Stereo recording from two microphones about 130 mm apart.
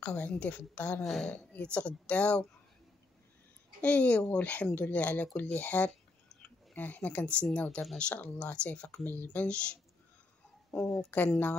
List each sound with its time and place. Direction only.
0.0 s speech: 10° left (ahead or behind)
3.8 s speech: 10° left (ahead or behind)